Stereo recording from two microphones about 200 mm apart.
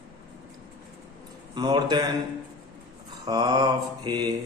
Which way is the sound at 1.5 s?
20° right (ahead or behind).